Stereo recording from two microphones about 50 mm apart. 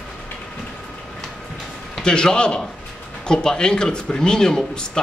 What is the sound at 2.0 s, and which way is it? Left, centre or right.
Speech, centre.